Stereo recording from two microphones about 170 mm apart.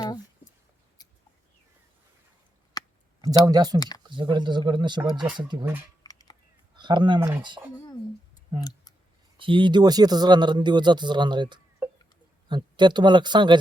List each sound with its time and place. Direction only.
1.0 s chicken: 20° left (ahead or behind)
2.8 s a sound: 20° left (ahead or behind)
3.4 s speech: 25° right (ahead or behind)
3.8 s speech: 25° left (ahead or behind)
4.1 s speech: 30° right (ahead or behind)
5.5 s speech: 15° right (ahead or behind)
6.0 s a sound: 20° left (ahead or behind)
6.7 s speech: 25° right (ahead or behind)
7.2 s speech: 15° right (ahead or behind)
9.4 s speech: 30° right (ahead or behind)